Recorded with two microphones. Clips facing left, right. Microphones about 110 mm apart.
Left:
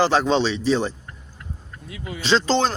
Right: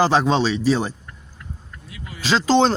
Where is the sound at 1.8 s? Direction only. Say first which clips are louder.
Left 5 dB; 60° left (ahead or behind).